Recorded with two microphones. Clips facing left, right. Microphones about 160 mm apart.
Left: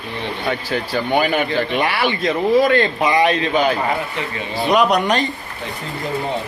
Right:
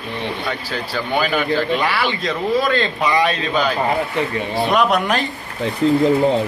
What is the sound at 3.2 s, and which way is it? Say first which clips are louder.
Speech: left 3 dB; 20° left (ahead or behind).